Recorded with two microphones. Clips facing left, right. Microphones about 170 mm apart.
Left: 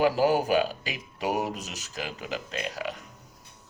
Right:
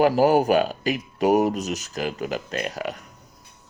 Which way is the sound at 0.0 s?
45° right (ahead or behind).